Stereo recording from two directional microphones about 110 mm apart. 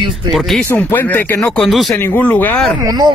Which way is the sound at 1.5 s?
Centre (ahead or behind).